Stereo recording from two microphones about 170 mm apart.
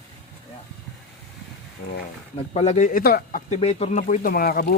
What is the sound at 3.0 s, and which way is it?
Speech, 60° left (ahead or behind).